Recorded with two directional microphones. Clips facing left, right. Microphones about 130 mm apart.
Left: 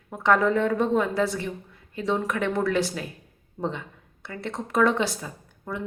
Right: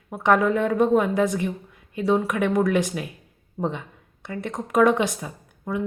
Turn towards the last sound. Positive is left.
turn(degrees=-15)  # may be behind; listen again after turning